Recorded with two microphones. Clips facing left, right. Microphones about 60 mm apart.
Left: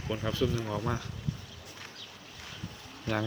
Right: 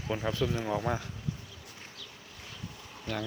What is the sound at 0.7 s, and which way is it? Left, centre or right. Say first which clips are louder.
Speech: right 2 dB; centre.